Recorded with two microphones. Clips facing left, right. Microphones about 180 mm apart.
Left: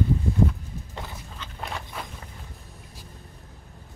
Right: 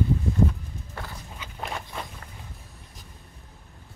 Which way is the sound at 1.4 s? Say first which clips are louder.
Right 1 dB; centre (ahead or behind).